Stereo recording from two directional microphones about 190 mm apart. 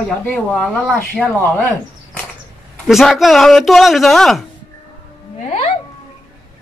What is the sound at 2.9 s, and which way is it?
Speech, centre (ahead or behind).